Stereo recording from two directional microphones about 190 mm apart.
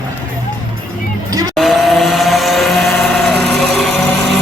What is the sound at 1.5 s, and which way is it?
Vehicle, centre (ahead or behind).